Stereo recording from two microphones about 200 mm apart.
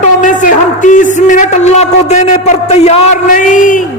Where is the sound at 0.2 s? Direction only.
40° left (ahead or behind).